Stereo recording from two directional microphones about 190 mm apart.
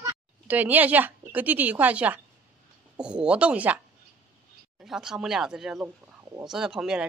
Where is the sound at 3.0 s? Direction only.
5° right (ahead or behind).